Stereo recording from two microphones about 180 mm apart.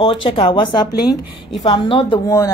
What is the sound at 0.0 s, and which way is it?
A woman's voice, 30° left (ahead or behind).